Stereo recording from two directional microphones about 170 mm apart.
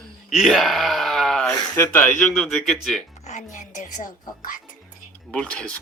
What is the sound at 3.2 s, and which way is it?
Speech, 45° left (ahead or behind).